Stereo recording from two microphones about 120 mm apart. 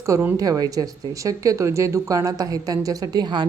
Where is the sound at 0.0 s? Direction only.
25° right (ahead or behind).